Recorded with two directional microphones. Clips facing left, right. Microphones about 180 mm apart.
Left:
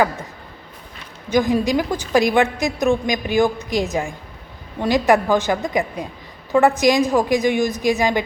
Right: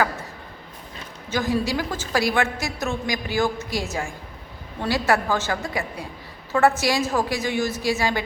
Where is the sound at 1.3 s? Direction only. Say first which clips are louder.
Left 6 dB; 15° left (ahead or behind).